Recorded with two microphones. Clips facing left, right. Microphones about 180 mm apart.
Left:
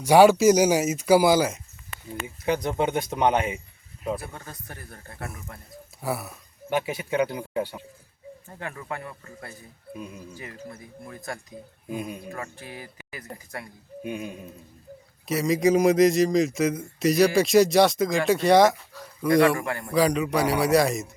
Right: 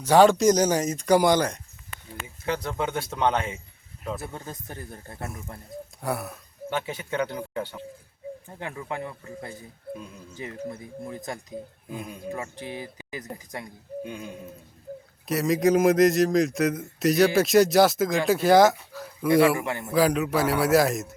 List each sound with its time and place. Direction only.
0.0 s speech: 10° left (ahead or behind)
2.2 s speech: 15° left (ahead or behind)
4.2 s speech: 20° right (ahead or behind)
6.0 s speech: centre (ahead or behind)
6.7 s speech: 15° left (ahead or behind)
8.5 s speech: 20° right (ahead or behind)
11.9 s speech: 15° left (ahead or behind)
12.3 s speech: 20° right (ahead or behind)
14.0 s speech: 15° left (ahead or behind)
15.3 s speech: centre (ahead or behind)